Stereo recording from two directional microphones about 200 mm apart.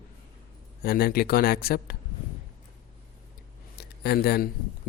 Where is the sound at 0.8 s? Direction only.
50° left (ahead or behind).